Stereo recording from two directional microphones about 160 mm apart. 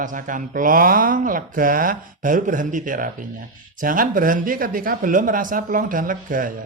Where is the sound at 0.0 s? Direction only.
55° right (ahead or behind).